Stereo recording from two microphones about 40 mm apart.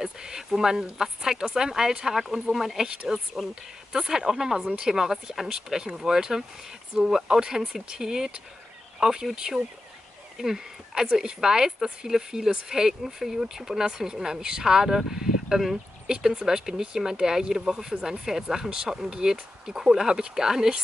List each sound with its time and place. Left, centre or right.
0.0 s speech: centre